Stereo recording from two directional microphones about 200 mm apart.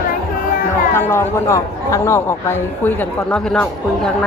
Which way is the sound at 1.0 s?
10° left (ahead or behind).